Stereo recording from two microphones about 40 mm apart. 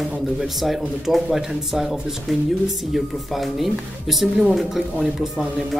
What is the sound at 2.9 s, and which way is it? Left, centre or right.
Speech, centre.